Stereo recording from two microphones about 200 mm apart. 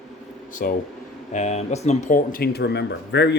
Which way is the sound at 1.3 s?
35° left (ahead or behind).